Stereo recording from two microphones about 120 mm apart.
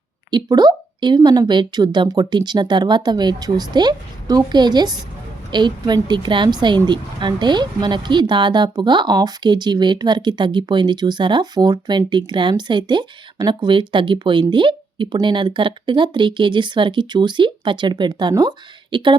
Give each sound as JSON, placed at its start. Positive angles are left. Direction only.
{"t": 0.3, "sound": "a woman's voice", "side_deg": -35}